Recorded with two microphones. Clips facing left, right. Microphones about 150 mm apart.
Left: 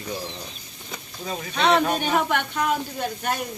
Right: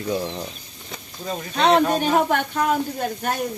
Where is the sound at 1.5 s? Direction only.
40° right (ahead or behind).